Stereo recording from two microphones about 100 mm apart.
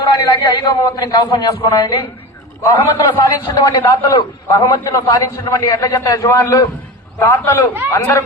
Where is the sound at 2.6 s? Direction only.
35° left (ahead or behind).